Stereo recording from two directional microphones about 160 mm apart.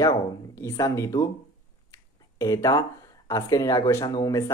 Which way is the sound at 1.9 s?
20° left (ahead or behind).